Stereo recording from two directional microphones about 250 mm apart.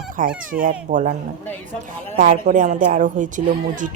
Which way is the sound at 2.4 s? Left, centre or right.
Right.